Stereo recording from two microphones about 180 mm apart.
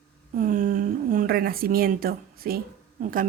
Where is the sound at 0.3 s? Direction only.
50° right (ahead or behind).